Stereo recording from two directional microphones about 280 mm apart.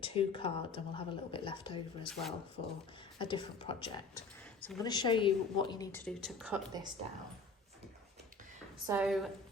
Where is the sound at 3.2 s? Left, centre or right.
Centre.